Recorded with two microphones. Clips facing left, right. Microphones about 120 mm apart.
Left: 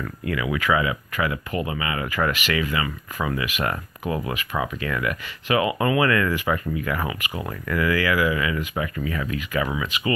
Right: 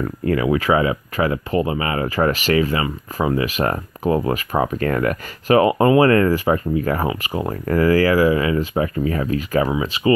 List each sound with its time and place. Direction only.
0.0 s speech: 35° right (ahead or behind)